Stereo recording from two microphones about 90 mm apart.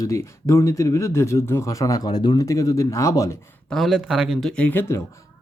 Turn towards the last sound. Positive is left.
turn(degrees=20)  # may be behind; listen again after turning